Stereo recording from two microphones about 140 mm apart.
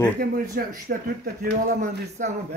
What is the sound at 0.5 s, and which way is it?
Speech, 90° right.